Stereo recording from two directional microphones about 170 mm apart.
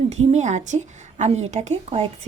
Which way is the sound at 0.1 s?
40° right (ahead or behind).